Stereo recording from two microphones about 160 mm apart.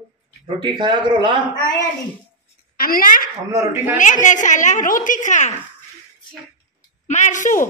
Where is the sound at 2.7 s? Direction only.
65° left (ahead or behind).